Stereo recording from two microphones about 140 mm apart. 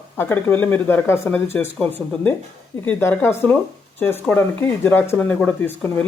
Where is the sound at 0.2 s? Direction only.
15° left (ahead or behind).